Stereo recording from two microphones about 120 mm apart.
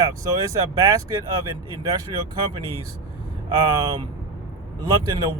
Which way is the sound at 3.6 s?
30° right (ahead or behind).